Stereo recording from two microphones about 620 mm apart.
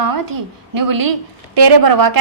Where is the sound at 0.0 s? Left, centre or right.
Right.